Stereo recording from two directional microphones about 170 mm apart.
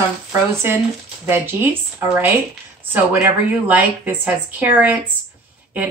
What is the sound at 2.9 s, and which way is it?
Speech, 10° right (ahead or behind).